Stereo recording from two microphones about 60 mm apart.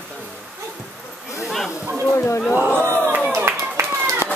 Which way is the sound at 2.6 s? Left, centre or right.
Right.